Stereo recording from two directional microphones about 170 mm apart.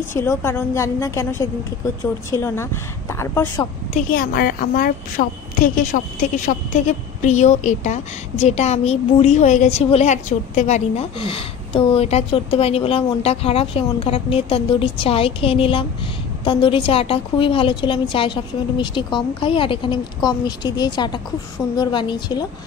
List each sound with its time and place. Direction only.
0.1 s a woman's voice: 15° left (ahead or behind)
3.9 s a woman's voice: 60° left (ahead or behind); by 22.5 s 25° left (ahead or behind)